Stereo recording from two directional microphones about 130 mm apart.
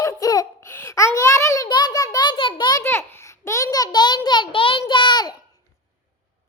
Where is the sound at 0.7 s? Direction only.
20° left (ahead or behind).